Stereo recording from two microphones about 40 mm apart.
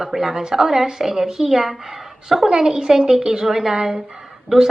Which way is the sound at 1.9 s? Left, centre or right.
Centre.